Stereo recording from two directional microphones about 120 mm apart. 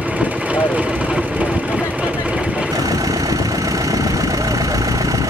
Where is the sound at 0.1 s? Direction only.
10° right (ahead or behind).